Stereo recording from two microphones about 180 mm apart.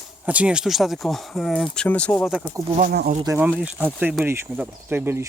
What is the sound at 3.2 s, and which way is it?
Speech, 10° right (ahead or behind).